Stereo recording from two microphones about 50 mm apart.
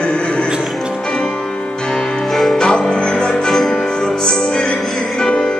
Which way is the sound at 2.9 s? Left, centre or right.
Centre.